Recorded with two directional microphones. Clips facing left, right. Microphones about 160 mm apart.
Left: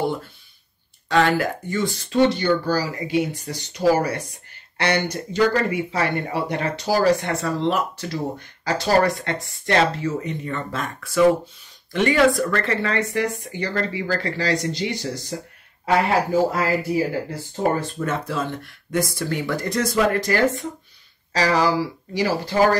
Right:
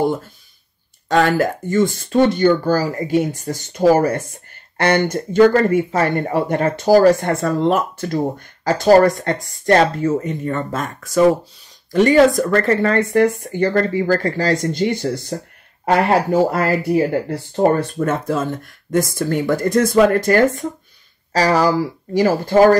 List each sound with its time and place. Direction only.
1.0 s speech: 45° right (ahead or behind)
15.8 s speech: 65° right (ahead or behind)
18.2 s speech: 45° right (ahead or behind)